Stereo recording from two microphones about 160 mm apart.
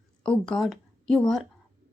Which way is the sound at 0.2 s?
5° left (ahead or behind).